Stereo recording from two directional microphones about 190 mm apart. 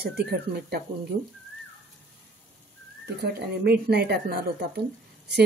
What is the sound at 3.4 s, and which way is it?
Speech, 55° right (ahead or behind).